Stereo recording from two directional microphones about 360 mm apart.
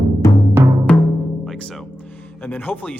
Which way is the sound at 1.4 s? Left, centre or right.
Centre.